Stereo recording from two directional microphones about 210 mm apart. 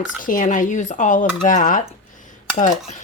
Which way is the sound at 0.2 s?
40° left (ahead or behind).